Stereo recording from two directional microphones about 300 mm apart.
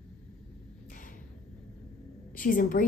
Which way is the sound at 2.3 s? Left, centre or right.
Left.